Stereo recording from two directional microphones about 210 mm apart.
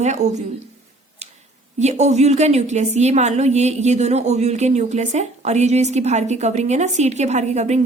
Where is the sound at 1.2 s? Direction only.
30° right (ahead or behind).